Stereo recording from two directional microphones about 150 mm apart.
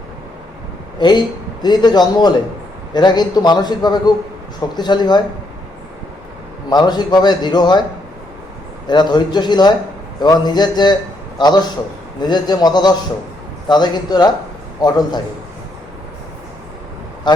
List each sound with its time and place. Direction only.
0.9 s a man's voice: 30° left (ahead or behind)
6.7 s a man's voice: 25° left (ahead or behind)
8.9 s a man's voice: 30° left (ahead or behind)
17.3 s a man's voice: 30° left (ahead or behind)